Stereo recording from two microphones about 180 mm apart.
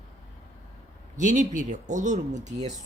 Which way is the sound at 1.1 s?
45° right (ahead or behind).